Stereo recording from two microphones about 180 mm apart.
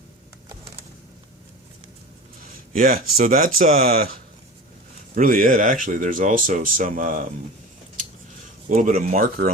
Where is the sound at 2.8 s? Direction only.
50° right (ahead or behind).